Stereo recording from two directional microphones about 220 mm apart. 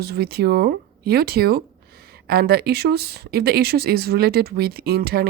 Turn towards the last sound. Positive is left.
turn(degrees=-45)  # may be behind; listen again after turning